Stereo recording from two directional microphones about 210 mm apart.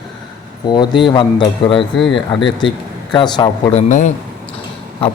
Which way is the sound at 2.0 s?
Centre (ahead or behind).